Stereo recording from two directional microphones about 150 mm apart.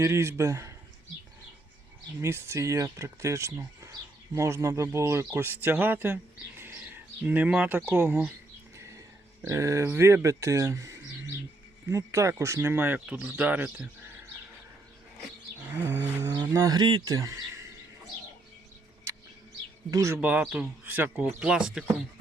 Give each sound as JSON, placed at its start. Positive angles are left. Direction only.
{"t": 0.0, "sound": "speech", "side_deg": -15}
{"t": 2.2, "sound": "speech", "side_deg": -20}
{"t": 15.6, "sound": "cattle", "side_deg": -15}
{"t": 16.5, "sound": "speech", "side_deg": -20}
{"t": 17.2, "sound": "speech", "side_deg": -20}
{"t": 19.1, "sound": "bird", "side_deg": -20}
{"t": 19.9, "sound": "speech", "side_deg": -20}